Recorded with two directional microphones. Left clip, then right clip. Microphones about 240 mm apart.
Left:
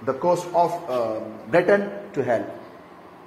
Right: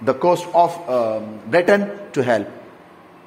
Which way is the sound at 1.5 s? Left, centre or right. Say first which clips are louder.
Right 3 dB; right.